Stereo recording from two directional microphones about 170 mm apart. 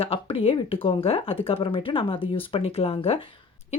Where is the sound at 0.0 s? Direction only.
35° left (ahead or behind).